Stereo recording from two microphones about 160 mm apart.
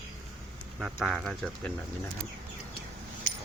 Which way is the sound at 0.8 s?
Centre (ahead or behind).